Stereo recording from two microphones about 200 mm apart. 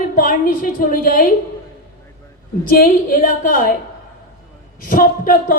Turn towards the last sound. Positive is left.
turn(degrees=45)  # may be behind; listen again after turning